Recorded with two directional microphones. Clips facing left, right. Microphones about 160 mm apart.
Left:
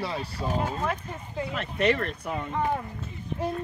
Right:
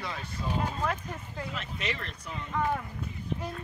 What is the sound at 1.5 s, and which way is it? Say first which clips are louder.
Speech: left 13 dB; 55° left (ahead or behind).